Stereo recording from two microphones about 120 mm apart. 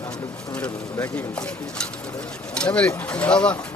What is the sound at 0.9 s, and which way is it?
Speech, 10° left (ahead or behind).